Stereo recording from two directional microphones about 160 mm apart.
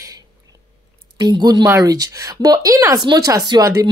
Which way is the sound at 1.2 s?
25° right (ahead or behind).